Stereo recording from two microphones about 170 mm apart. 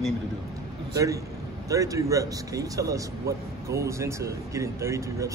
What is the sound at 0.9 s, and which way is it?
Speech, 20° right (ahead or behind).